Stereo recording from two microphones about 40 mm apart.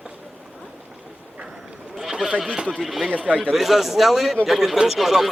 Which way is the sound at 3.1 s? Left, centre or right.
Right.